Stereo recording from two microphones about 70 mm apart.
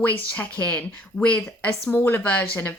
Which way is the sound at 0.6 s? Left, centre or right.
Centre.